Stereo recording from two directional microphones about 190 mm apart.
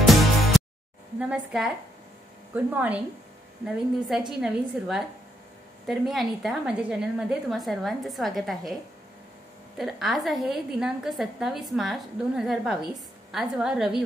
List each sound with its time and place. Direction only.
0.0 s music: centre (ahead or behind)
1.2 s a woman's voice: 5° right (ahead or behind)
9.8 s a woman's voice: centre (ahead or behind)